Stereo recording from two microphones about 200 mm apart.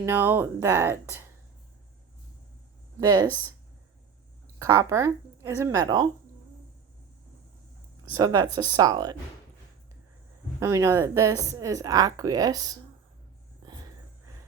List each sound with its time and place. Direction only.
0.0 s a woman's voice: 10° right (ahead or behind)
3.0 s speech: 20° right (ahead or behind)
4.6 s a woman's voice: 15° right (ahead or behind)
8.1 s speech: 20° right (ahead or behind)
10.6 s a woman's voice: 15° right (ahead or behind)